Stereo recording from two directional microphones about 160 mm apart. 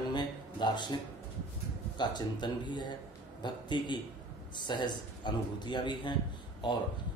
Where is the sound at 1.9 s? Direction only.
30° left (ahead or behind).